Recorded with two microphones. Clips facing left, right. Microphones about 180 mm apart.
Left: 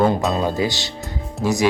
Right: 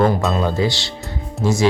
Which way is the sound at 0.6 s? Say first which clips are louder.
Right 2 dB; 20° left (ahead or behind).